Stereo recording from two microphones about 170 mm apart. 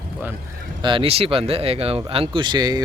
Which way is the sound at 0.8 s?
30° right (ahead or behind).